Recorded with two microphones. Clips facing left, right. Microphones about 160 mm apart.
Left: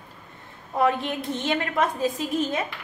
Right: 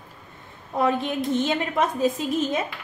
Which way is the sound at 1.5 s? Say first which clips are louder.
Right 1 dB; 20° right (ahead or behind).